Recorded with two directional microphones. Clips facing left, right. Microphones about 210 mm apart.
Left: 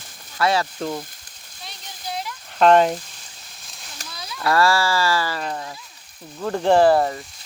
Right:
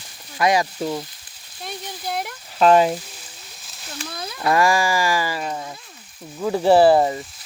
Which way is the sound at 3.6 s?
Centre (ahead or behind).